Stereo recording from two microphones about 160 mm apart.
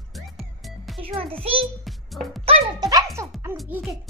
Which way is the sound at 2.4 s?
40° right (ahead or behind).